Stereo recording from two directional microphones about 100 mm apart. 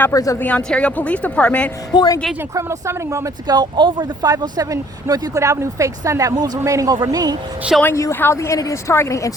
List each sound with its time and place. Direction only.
0.1 s speech: 35° left (ahead or behind)
0.4 s speech: 15° left (ahead or behind)
1.9 s speech: 45° left (ahead or behind)
2.6 s speech: 30° right (ahead or behind)
3.4 s speech: 45° right (ahead or behind)
7.9 s a woman's voice: 25° left (ahead or behind)